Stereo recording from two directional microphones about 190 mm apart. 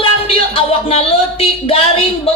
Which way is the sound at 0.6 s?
30° left (ahead or behind).